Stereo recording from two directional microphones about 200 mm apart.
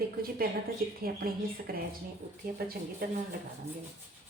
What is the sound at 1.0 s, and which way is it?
A woman's voice, 45° right (ahead or behind).